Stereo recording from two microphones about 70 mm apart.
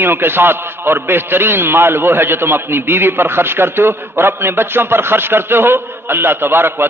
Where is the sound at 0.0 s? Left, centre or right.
Right.